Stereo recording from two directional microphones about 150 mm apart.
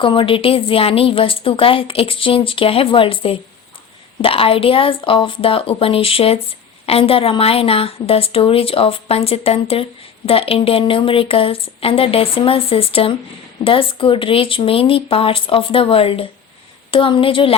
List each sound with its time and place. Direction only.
0.0 s speech: 35° left (ahead or behind)